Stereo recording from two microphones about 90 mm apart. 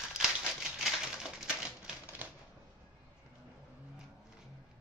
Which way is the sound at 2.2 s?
20° right (ahead or behind).